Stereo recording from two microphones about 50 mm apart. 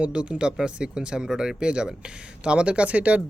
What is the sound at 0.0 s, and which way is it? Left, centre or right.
Speech, right.